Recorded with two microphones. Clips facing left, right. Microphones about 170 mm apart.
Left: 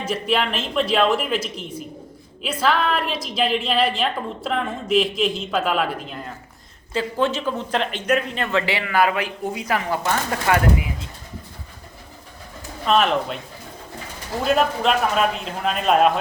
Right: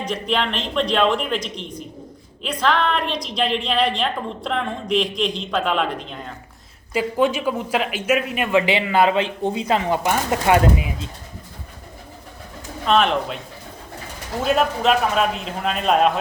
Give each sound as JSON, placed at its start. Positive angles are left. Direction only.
{"t": 0.0, "sound": "a woman's voice", "side_deg": 5}
{"t": 6.9, "sound": "speech", "side_deg": -10}
{"t": 12.8, "sound": "a woman's voice", "side_deg": 0}
{"t": 14.4, "sound": "a woman's voice", "side_deg": 0}